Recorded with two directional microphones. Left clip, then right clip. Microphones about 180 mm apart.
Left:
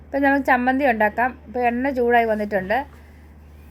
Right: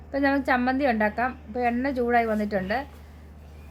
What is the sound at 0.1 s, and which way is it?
A woman's voice, 15° left (ahead or behind).